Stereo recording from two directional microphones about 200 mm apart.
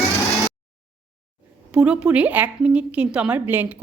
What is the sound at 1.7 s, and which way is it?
A woman's voice, 5° right (ahead or behind).